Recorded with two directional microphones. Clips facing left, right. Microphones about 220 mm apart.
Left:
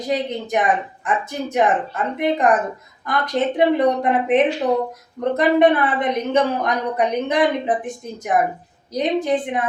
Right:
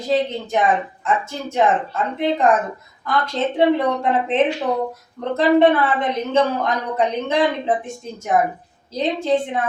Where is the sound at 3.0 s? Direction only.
15° left (ahead or behind).